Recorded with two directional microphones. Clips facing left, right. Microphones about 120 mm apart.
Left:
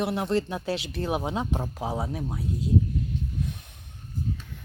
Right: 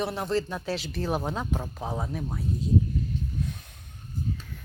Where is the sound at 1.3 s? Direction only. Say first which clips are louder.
Left 2 dB; 25° left (ahead or behind).